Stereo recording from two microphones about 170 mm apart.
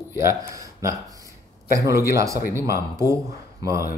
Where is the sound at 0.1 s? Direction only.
15° right (ahead or behind).